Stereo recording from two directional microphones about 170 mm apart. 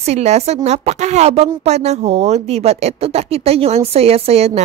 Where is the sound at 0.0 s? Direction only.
40° right (ahead or behind).